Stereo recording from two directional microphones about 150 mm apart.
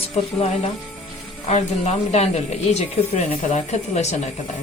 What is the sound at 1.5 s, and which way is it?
A woman's voice, 45° left (ahead or behind).